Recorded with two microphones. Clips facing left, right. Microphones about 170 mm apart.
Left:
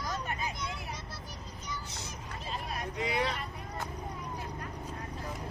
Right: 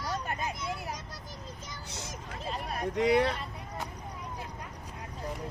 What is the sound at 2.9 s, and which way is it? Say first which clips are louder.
Speech: right 8 dB; 65° right (ahead or behind).